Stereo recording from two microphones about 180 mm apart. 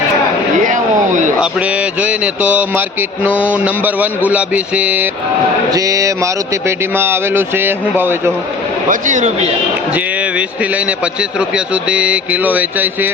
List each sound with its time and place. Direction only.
0.6 s a sound: 45° right (ahead or behind)
1.4 s mantra: 5° right (ahead or behind)
5.7 s mantra: 20° right (ahead or behind)
8.9 s a man's voice: 45° right (ahead or behind)
9.9 s mantra: 10° right (ahead or behind)